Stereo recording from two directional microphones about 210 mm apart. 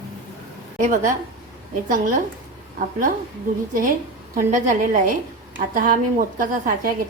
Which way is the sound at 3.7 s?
40° right (ahead or behind).